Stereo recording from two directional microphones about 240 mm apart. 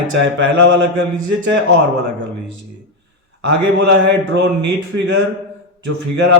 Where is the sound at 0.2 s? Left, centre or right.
Right.